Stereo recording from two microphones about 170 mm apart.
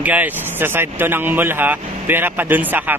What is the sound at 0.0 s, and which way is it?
Speech, 10° right (ahead or behind).